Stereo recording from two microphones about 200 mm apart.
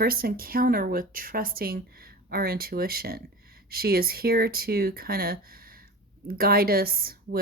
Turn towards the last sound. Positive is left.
turn(degrees=-50)  # may be behind; listen again after turning